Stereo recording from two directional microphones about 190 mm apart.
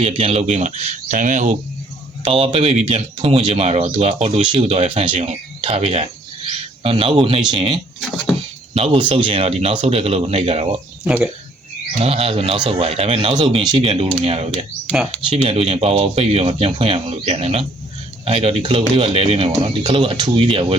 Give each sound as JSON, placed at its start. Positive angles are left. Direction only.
{"t": 0.0, "sound": "speech", "side_deg": -30}
{"t": 2.2, "sound": "a man's voice", "side_deg": -30}
{"t": 11.0, "sound": "speech", "side_deg": -5}
{"t": 11.9, "sound": "speech", "side_deg": -30}